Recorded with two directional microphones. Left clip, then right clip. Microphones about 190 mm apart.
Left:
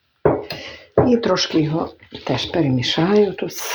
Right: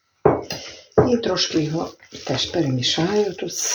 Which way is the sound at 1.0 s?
35° left (ahead or behind).